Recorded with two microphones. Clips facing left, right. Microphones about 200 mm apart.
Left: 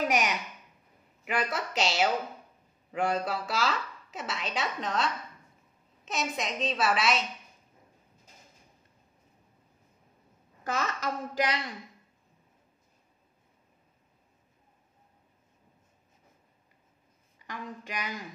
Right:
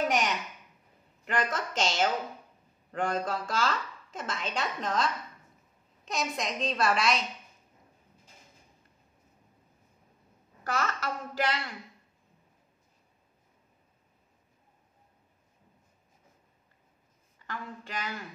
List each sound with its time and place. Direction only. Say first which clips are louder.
0.0 s a sound: even; 10° left (ahead or behind)
1.2 s a woman's voice: even; 10° left (ahead or behind)
10.6 s a woman's voice: even; 20° left (ahead or behind)
17.5 s a woman's voice: even; 15° left (ahead or behind)